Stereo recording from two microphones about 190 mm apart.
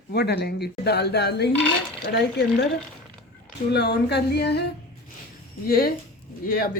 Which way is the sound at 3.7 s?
60° left (ahead or behind).